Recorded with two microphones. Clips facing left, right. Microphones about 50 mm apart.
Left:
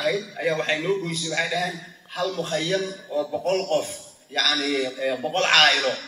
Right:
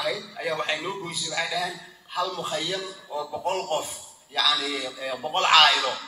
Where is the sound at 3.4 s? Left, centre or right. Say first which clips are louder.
Left 2 dB; centre.